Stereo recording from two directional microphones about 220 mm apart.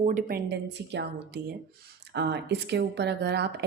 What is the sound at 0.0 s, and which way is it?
A woman's voice, 35° right (ahead or behind).